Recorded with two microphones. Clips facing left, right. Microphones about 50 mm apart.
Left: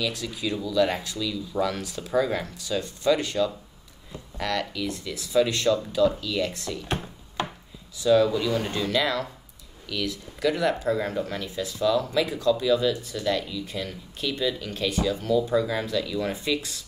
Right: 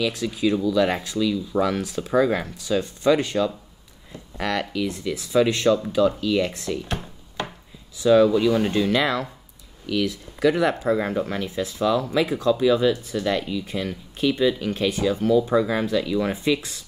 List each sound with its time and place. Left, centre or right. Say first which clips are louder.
0.0 s speech: right 6 dB; right
8.0 s speech: right 4 dB; right